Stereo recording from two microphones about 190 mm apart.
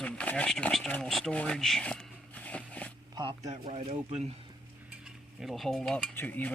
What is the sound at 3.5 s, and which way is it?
Speech, 35° right (ahead or behind).